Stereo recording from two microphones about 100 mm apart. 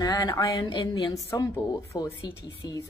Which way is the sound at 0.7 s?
50° left (ahead or behind).